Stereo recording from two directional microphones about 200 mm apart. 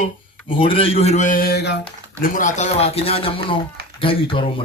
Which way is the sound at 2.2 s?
40° left (ahead or behind).